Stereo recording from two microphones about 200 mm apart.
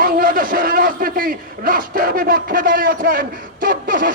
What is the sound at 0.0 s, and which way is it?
A man's voice, 45° right (ahead or behind).